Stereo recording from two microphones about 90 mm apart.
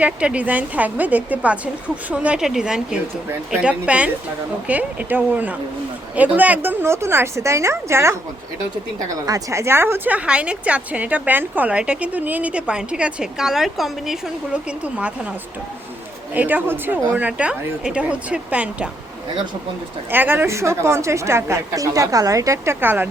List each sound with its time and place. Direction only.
0.0 s a woman's voice: 15° right (ahead or behind); by 8.1 s 30° right (ahead or behind)
9.2 s a woman's voice: 35° right (ahead or behind); by 14.2 s 5° right (ahead or behind)
14.5 s a woman's voice: 15° right (ahead or behind)
16.3 s a woman's voice: 15° right (ahead or behind)
20.1 s a woman's voice: 25° right (ahead or behind)